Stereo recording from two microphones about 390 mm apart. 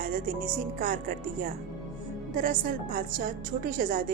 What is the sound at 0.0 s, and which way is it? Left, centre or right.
Speech, right.